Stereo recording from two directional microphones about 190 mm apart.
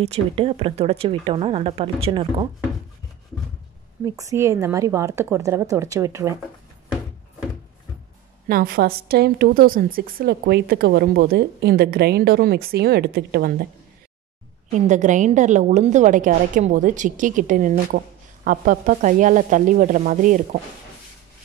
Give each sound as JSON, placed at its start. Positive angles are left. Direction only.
{"t": 0.0, "sound": "speech", "side_deg": -35}
{"t": 4.0, "sound": "a woman's voice", "side_deg": -15}
{"t": 8.5, "sound": "a woman's voice", "side_deg": -50}
{"t": 14.7, "sound": "a woman's voice", "side_deg": -40}